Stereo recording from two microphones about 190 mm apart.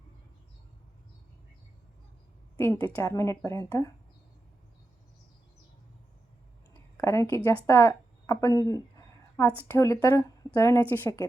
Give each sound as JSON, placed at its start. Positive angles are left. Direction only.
{"t": 2.6, "sound": "a woman's voice", "side_deg": 10}
{"t": 6.9, "sound": "a woman's voice", "side_deg": 15}